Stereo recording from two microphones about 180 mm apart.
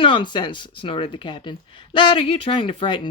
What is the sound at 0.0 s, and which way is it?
Speech, 25° left (ahead or behind).